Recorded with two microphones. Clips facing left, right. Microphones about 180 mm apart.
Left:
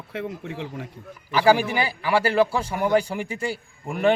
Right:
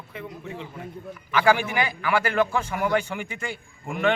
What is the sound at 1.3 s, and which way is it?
A man's voice, 35° left (ahead or behind).